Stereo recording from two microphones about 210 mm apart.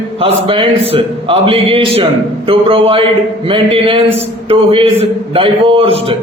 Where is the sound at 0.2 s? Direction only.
25° right (ahead or behind).